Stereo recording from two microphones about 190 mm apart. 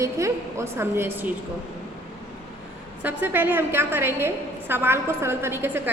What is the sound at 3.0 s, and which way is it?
A woman's voice, 10° right (ahead or behind).